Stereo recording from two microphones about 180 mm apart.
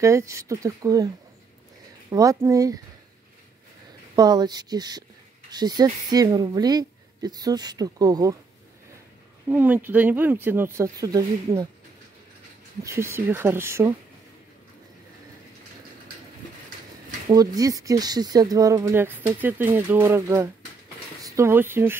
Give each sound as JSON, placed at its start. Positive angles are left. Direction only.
{"t": 0.0, "sound": "a woman's voice", "side_deg": -15}
{"t": 4.1, "sound": "a woman's voice", "side_deg": -20}
{"t": 9.5, "sound": "speech", "side_deg": -10}
{"t": 12.8, "sound": "speech", "side_deg": -15}
{"t": 17.3, "sound": "speech", "side_deg": -20}